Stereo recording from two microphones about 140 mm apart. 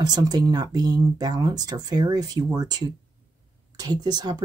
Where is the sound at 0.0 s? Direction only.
30° right (ahead or behind).